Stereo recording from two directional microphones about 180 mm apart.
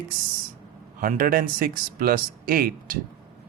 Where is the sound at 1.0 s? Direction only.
50° right (ahead or behind).